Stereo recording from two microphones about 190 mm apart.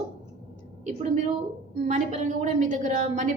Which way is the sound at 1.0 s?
35° right (ahead or behind).